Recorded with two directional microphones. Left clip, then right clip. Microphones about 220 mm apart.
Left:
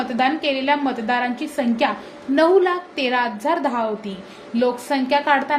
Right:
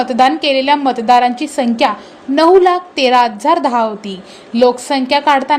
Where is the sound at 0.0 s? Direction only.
35° right (ahead or behind).